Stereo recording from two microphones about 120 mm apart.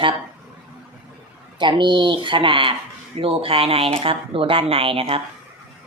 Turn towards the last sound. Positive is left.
turn(degrees=-50)  # may be behind; listen again after turning